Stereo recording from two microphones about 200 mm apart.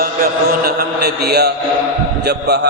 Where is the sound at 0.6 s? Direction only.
50° right (ahead or behind).